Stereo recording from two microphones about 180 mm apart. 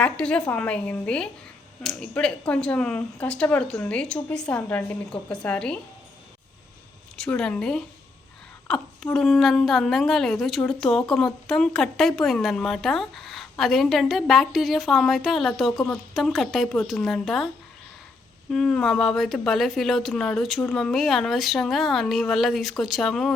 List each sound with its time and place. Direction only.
0.0 s a woman's voice: 5° left (ahead or behind)
7.2 s speech: 5° left (ahead or behind)
8.6 s a sound: 5° left (ahead or behind)
9.1 s speech: centre (ahead or behind)
18.5 s speech: 5° left (ahead or behind)